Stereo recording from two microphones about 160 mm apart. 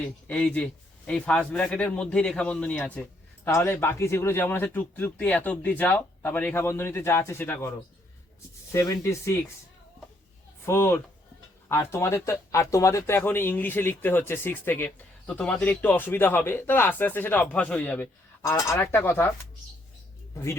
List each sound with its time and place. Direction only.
0.3 s speech: 5° left (ahead or behind)
8.7 s speech: 20° left (ahead or behind)
10.7 s speech: 15° left (ahead or behind)
20.3 s speech: 15° left (ahead or behind)